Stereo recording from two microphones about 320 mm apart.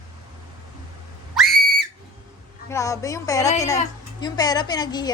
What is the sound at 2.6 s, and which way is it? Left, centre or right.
A woman's voice, centre.